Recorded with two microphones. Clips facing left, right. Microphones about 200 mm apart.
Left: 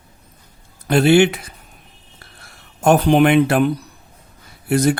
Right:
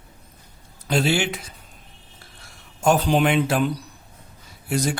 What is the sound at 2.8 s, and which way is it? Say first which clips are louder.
Speech: left 6 dB; 60° left (ahead or behind).